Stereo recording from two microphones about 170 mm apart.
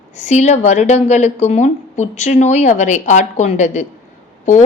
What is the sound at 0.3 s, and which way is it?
A woman's voice, 45° left (ahead or behind).